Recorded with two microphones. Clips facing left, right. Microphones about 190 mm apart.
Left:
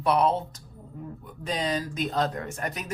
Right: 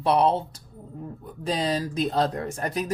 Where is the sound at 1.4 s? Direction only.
30° right (ahead or behind).